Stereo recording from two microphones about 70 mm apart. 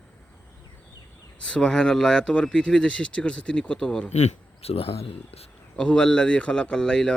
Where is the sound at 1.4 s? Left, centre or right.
Centre.